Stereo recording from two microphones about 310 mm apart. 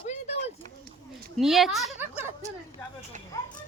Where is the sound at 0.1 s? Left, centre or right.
Centre.